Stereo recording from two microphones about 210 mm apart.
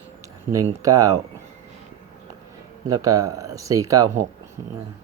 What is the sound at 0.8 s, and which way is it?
Speech, 15° right (ahead or behind).